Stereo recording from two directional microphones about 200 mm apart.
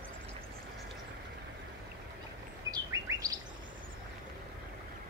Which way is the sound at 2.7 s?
15° right (ahead or behind).